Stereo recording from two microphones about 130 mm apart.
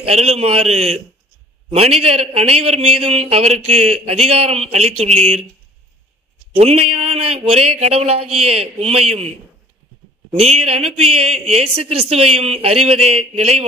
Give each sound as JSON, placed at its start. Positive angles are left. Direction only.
{"t": 0.0, "sound": "a man's voice", "side_deg": -55}
{"t": 6.6, "sound": "a man's voice", "side_deg": -50}
{"t": 10.3, "sound": "a man's voice", "side_deg": -55}